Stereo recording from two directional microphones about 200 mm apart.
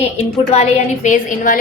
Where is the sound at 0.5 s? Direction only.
35° left (ahead or behind).